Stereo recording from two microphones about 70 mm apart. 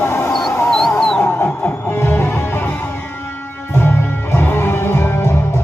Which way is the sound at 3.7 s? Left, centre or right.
Left.